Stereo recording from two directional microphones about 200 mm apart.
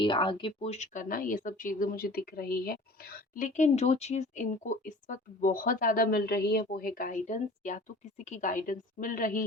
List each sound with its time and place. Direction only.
0.0 s speech: 25° left (ahead or behind); by 9.4 s 45° left (ahead or behind)